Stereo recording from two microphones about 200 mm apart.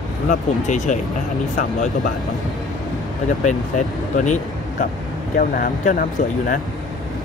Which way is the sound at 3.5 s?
35° left (ahead or behind).